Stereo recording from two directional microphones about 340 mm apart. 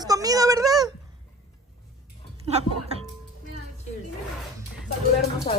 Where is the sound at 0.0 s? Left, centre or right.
Centre.